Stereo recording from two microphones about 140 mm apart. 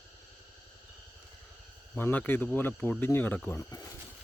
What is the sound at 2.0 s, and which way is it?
Speech, 15° left (ahead or behind).